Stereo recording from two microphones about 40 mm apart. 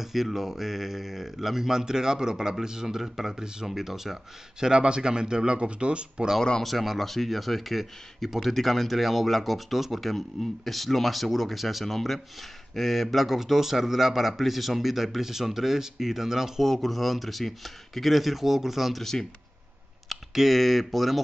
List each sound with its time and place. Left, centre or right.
0.0 s speech: centre
4.6 s speech: right
6.6 s speech: centre
16.6 s speech: centre
20.3 s speech: centre